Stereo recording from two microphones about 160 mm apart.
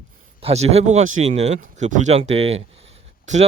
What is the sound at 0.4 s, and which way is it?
Speech, 40° right (ahead or behind).